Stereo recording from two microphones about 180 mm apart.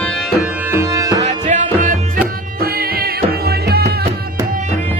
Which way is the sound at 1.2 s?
40° right (ahead or behind).